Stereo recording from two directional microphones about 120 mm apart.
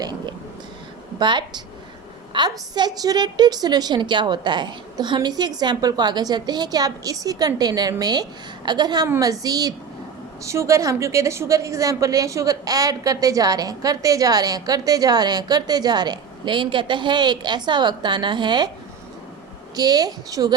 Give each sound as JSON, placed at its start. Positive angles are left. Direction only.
{"t": 0.0, "sound": "a sound", "side_deg": -40}
{"t": 1.2, "sound": "a woman's voice", "side_deg": -40}
{"t": 19.7, "sound": "a woman's voice", "side_deg": -35}